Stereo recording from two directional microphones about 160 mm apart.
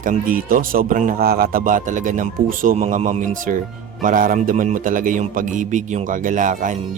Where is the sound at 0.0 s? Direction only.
60° right (ahead or behind).